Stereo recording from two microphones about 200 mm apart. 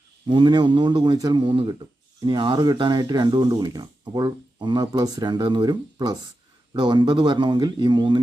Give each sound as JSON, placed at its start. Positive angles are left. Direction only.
{"t": 0.3, "sound": "speech", "side_deg": -25}